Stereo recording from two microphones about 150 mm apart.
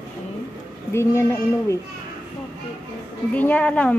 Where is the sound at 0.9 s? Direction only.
20° left (ahead or behind).